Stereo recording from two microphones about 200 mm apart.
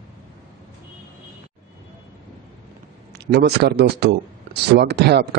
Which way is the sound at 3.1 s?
55° right (ahead or behind).